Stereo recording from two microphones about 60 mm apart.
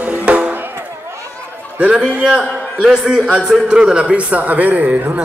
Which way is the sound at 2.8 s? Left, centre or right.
Centre.